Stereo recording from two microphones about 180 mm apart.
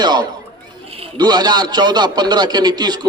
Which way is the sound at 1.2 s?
25° right (ahead or behind).